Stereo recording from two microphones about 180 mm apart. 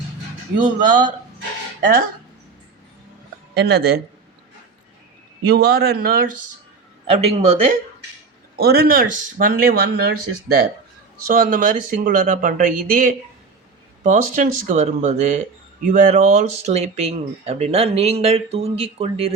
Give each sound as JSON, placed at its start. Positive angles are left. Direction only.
{"t": 0.6, "sound": "speech", "side_deg": -45}
{"t": 3.5, "sound": "speech", "side_deg": -60}
{"t": 5.5, "sound": "speech", "side_deg": -65}
{"t": 7.3, "sound": "speech", "side_deg": -35}
{"t": 8.5, "sound": "speech", "side_deg": -60}
{"t": 11.3, "sound": "speech", "side_deg": -50}